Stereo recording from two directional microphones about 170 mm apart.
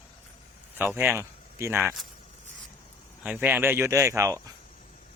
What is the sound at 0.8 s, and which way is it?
Speech, 15° right (ahead or behind).